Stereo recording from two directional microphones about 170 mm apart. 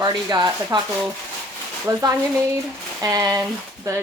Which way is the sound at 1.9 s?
20° right (ahead or behind).